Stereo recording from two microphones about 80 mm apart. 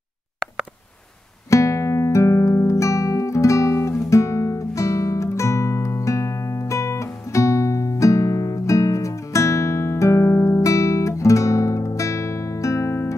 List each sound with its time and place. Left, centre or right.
1.5 s music: left